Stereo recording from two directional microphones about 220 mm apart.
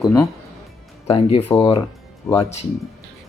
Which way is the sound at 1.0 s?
25° left (ahead or behind).